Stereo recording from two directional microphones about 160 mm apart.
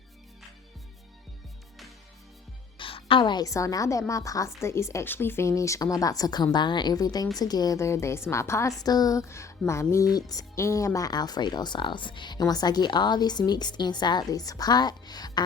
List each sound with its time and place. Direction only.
2.7 s a woman's voice: 35° left (ahead or behind)